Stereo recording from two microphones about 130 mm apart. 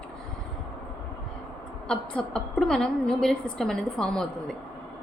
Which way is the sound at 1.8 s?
5° left (ahead or behind).